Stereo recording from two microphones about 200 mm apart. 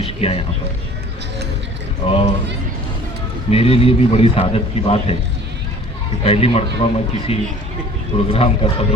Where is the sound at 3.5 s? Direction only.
30° left (ahead or behind).